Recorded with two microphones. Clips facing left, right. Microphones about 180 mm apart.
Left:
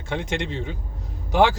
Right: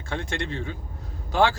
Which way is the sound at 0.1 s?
20° left (ahead or behind).